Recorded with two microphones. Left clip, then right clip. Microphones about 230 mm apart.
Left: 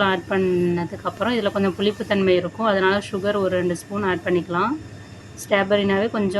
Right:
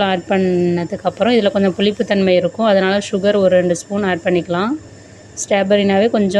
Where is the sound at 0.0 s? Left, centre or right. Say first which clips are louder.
Right 4 dB; right.